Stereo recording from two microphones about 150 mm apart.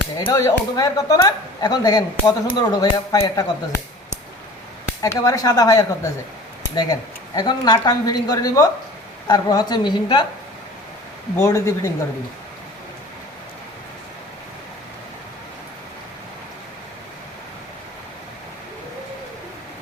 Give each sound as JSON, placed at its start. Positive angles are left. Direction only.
{"t": 0.3, "sound": "speech", "side_deg": 25}
{"t": 5.0, "sound": "speech", "side_deg": 25}
{"t": 11.3, "sound": "speech", "side_deg": 20}